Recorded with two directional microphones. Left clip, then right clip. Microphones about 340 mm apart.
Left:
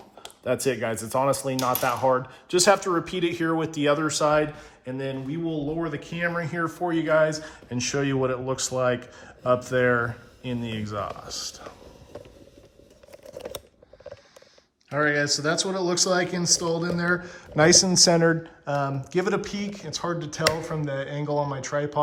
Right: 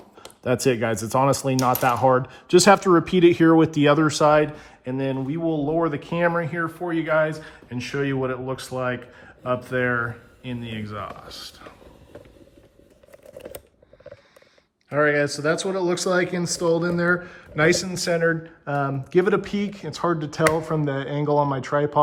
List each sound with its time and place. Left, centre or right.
0.4 s speech: right
6.3 s speech: centre
14.8 s speech: centre